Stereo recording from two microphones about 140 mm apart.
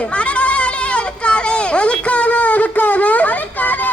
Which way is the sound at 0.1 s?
10° left (ahead or behind).